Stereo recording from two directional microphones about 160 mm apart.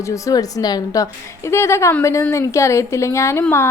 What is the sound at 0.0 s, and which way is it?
A woman's voice, 20° left (ahead or behind).